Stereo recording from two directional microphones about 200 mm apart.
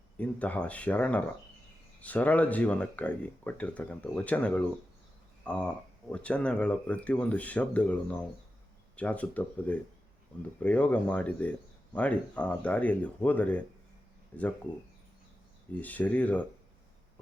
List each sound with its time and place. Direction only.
0.2 s speech: 5° left (ahead or behind)
15.7 s speech: 10° left (ahead or behind)